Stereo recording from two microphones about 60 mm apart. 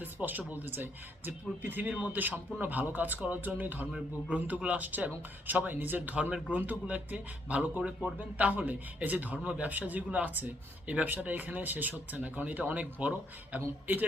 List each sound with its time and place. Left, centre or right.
0.0 s speech: right